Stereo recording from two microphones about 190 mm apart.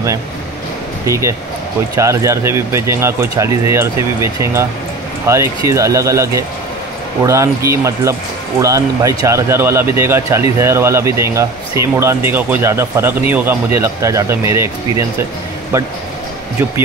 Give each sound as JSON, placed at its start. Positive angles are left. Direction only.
{"t": 1.0, "sound": "speech", "side_deg": -15}